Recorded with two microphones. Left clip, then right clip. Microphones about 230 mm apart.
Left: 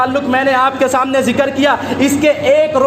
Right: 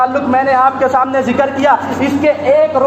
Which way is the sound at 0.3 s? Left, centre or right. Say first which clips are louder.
Right 2 dB; left.